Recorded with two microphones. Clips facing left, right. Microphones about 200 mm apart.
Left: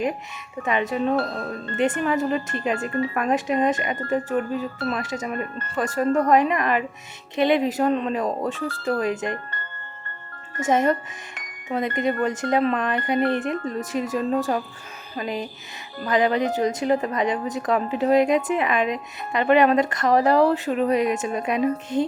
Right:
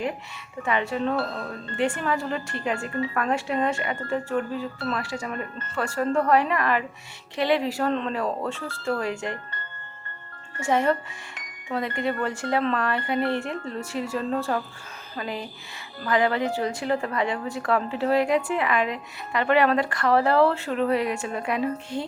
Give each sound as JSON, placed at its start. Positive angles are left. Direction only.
{"t": 0.6, "sound": "a woman's voice", "side_deg": 20}
{"t": 10.6, "sound": "a woman's voice", "side_deg": 20}
{"t": 11.9, "sound": "a woman's voice", "side_deg": 20}